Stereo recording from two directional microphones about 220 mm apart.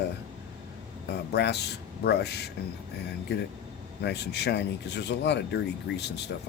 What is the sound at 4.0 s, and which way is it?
Speech, 50° left (ahead or behind).